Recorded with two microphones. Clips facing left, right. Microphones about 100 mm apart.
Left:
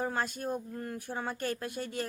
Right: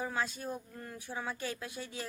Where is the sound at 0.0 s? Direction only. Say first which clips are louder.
Left 3 dB; 50° left (ahead or behind).